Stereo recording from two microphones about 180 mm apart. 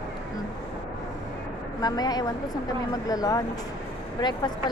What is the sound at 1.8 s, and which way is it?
Speech, 20° left (ahead or behind).